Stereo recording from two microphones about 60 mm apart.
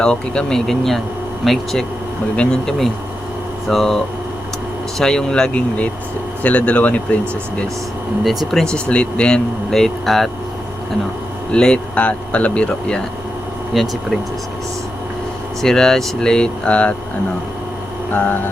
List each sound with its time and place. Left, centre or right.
0.0 s speech: centre
2.3 s speech: centre
2.6 s speech: centre
5.5 s speech: left
8.2 s speech: centre
8.7 s speech: centre
11.5 s speech: centre
13.7 s speech: centre
15.6 s speech: centre
18.1 s a sound: left